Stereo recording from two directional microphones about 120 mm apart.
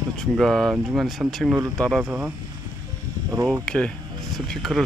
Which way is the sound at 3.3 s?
25° right (ahead or behind).